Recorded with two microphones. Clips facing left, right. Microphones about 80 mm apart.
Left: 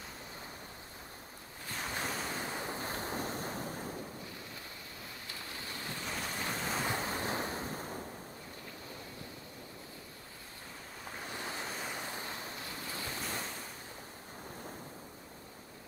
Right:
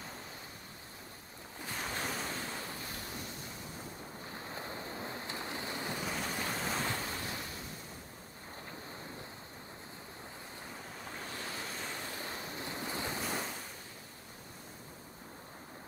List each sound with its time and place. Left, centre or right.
1.7 s ocean: centre
2.3 s waves: centre
2.8 s waves: left
4.3 s waves: right
6.0 s waves: centre
6.9 s waves: left
11.2 s waves: centre
12.3 s waves: right
13.2 s waves: centre